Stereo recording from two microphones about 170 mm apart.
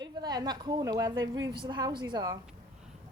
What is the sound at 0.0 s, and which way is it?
A woman's voice, 25° right (ahead or behind).